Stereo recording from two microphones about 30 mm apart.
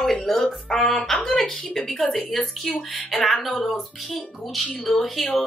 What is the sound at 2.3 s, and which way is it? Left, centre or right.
Speech, centre.